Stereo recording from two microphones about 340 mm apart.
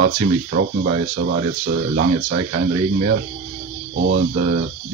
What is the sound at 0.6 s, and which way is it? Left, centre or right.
Speech, right.